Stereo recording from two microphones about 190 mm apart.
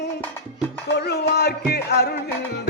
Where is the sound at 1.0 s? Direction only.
55° left (ahead or behind).